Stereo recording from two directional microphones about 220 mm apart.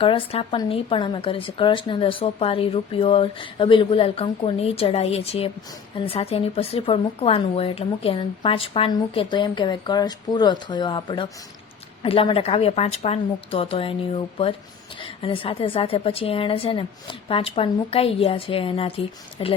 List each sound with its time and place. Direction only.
0.0 s a woman's voice: 25° left (ahead or behind)